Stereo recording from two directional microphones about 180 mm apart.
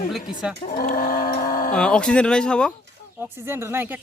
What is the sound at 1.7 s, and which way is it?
Speech, 5° left (ahead or behind).